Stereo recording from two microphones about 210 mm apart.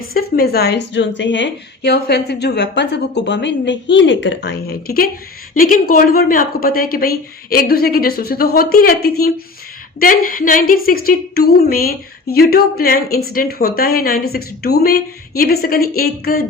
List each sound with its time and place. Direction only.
0.0 s a woman's voice: 45° left (ahead or behind)